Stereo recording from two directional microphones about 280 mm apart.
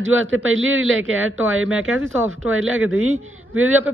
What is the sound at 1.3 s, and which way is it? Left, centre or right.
Speech, right.